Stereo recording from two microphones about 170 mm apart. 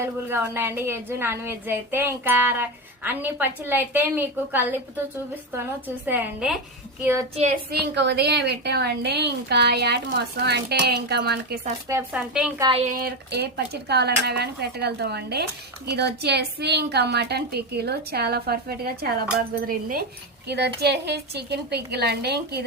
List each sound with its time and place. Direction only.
0.0 s a woman's voice: 15° right (ahead or behind)
6.1 s a woman's voice: 10° right (ahead or behind)
7.3 s a woman's voice: 45° right (ahead or behind)
7.7 s a woman's voice: 80° right
12.1 s a woman's voice: 5° right (ahead or behind)
12.5 s speech: 25° right (ahead or behind)
12.8 s a woman's voice: 55° right (ahead or behind)
20.5 s a woman's voice: 80° right